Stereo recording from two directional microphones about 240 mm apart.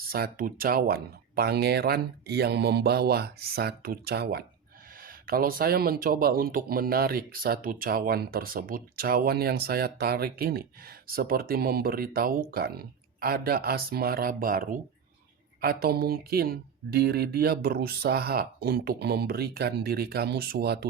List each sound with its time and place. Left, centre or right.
0.1 s speech: right